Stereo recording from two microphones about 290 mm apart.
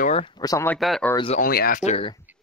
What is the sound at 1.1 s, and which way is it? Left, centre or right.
Speech, centre.